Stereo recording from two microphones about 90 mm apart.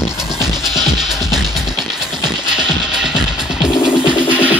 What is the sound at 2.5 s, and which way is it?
Music, 5° right (ahead or behind).